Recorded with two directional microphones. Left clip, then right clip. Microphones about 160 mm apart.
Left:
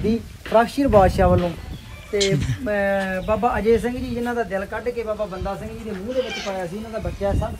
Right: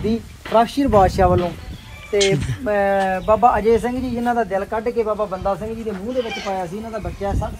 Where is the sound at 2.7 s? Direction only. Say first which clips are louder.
Right 4 dB; 30° right (ahead or behind).